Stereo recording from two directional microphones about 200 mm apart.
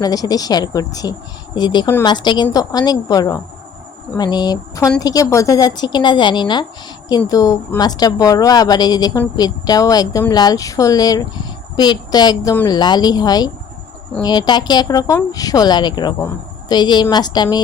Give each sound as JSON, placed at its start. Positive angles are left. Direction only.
{"t": 0.0, "sound": "speech", "side_deg": 20}